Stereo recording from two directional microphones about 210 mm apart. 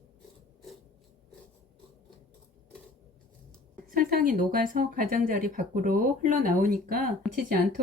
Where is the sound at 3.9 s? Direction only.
45° right (ahead or behind).